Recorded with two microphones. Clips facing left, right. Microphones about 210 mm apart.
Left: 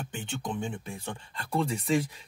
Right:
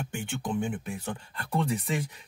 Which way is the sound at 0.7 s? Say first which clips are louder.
Right 3 dB; 25° left (ahead or behind).